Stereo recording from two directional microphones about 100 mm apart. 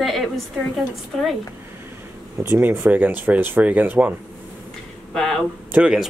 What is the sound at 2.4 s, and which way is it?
Speech, 20° right (ahead or behind).